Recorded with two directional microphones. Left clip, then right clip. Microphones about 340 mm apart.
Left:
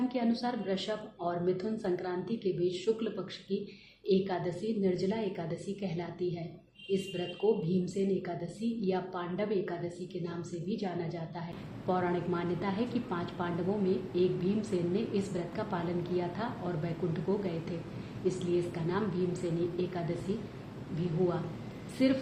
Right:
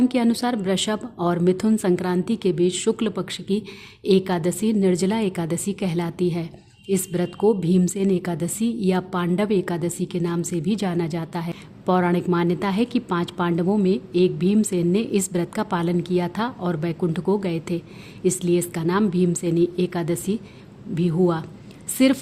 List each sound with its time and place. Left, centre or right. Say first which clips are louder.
0.1 s a woman's voice: right 11 dB; right
7.4 s a woman's voice: right 10 dB; right
22.0 s a woman's voice: right 10 dB; right